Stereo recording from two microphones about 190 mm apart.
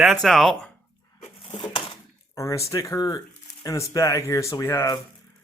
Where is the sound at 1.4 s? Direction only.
25° left (ahead or behind).